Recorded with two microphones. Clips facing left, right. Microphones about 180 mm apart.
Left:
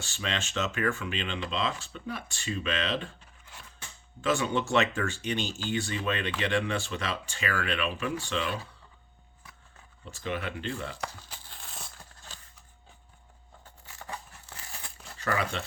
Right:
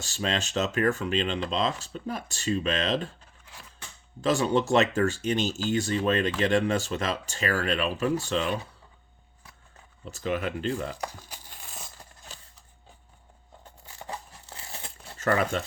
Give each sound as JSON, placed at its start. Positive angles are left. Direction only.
{"t": 0.0, "sound": "speech", "side_deg": -40}
{"t": 4.2, "sound": "speech", "side_deg": -35}
{"t": 10.1, "sound": "speech", "side_deg": -40}
{"t": 10.9, "sound": "a sound", "side_deg": -15}
{"t": 14.1, "sound": "crumpling", "side_deg": -30}
{"t": 15.6, "sound": "speech", "side_deg": -45}